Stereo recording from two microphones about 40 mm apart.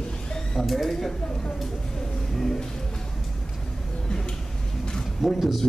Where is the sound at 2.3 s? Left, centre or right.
Centre.